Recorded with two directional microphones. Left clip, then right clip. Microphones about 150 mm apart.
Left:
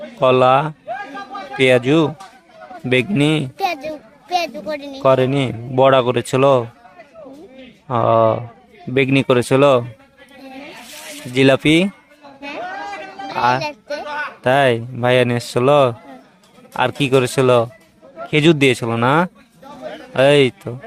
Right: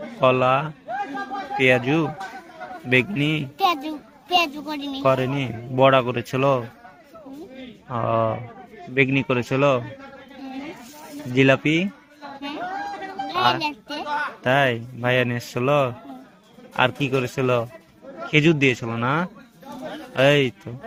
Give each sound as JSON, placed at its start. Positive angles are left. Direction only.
{"t": 0.2, "sound": "speech", "side_deg": 60}
{"t": 3.6, "sound": "a sound", "side_deg": 20}
{"t": 4.3, "sound": "a child's voice", "side_deg": 20}
{"t": 5.0, "sound": "speech", "side_deg": 60}
{"t": 7.9, "sound": "speech", "side_deg": 65}
{"t": 11.3, "sound": "speech", "side_deg": 65}
{"t": 13.3, "sound": "music", "side_deg": 65}
{"t": 13.6, "sound": "a sound", "side_deg": 20}
{"t": 14.4, "sound": "speech", "side_deg": 65}